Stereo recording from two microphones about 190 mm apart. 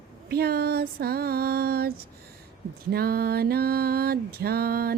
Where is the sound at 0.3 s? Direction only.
55° right (ahead or behind).